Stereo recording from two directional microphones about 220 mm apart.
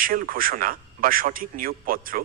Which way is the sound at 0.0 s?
40° right (ahead or behind).